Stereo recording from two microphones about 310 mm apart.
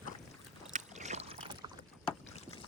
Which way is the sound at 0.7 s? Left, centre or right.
Right.